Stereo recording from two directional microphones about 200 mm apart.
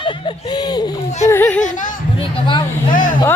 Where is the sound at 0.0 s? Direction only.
20° left (ahead or behind).